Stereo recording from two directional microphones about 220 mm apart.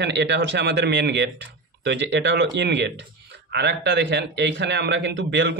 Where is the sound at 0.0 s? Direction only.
50° right (ahead or behind).